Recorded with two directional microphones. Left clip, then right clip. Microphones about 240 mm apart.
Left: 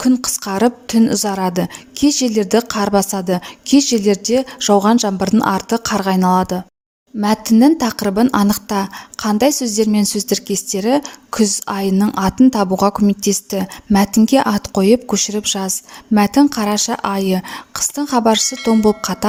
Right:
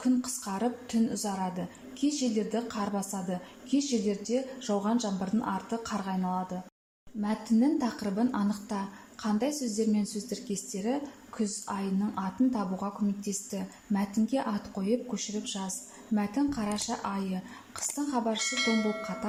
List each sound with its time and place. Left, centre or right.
0.0 s a woman's voice: left
18.4 s speech: centre